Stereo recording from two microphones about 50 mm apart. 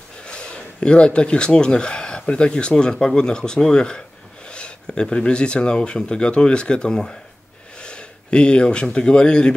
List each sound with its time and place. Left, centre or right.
0.2 s speech: centre